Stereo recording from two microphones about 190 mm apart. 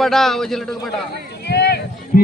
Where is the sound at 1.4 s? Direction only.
60° left (ahead or behind).